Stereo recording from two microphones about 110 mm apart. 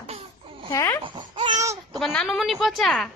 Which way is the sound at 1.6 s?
30° right (ahead or behind).